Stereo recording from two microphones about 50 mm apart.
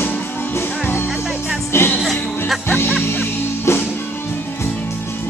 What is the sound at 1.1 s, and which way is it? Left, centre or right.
Music, centre.